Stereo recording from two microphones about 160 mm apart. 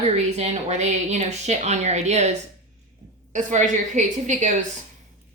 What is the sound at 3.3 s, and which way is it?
A woman's voice, 50° right (ahead or behind).